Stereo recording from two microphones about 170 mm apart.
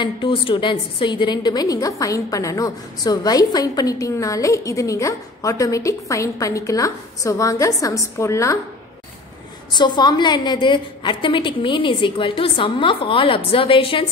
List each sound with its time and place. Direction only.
0.0 s a woman's voice: 30° left (ahead or behind)
9.8 s a woman's voice: 25° left (ahead or behind)